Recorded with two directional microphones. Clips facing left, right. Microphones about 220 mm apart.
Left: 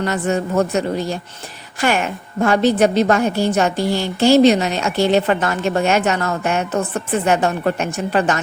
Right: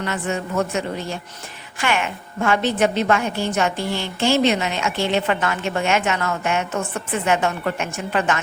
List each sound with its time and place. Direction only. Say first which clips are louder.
0.0 s a woman's voice: left 5 dB; 40° left (ahead or behind)